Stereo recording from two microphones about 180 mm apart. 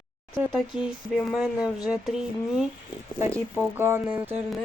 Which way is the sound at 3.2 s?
15° right (ahead or behind).